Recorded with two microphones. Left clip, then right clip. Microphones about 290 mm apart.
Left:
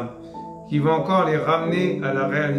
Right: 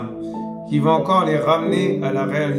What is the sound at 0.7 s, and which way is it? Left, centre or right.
Speech, centre.